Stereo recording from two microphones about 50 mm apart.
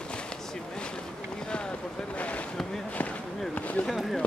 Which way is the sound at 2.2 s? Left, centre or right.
Left.